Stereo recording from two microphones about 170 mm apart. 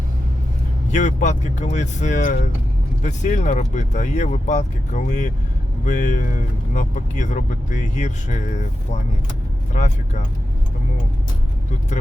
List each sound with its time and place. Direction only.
0.9 s speech: 45° left (ahead or behind)
9.7 s speech: 45° left (ahead or behind)